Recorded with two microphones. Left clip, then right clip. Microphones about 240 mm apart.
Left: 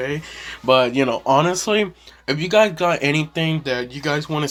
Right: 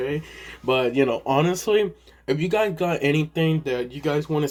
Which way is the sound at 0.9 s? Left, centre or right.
Centre.